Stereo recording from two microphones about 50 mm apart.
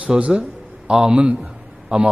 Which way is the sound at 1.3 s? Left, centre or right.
Centre.